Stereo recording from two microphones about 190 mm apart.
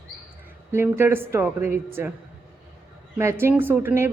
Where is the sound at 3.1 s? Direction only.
15° right (ahead or behind).